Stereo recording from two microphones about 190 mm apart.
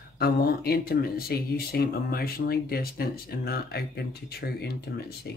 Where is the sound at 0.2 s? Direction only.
55° left (ahead or behind).